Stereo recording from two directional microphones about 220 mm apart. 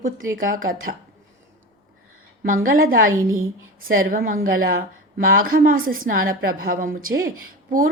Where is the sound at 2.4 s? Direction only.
40° right (ahead or behind).